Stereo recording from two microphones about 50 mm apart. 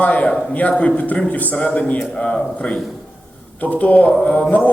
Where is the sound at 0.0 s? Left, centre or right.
Left.